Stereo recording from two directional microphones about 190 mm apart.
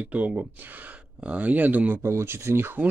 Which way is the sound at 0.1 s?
10° right (ahead or behind).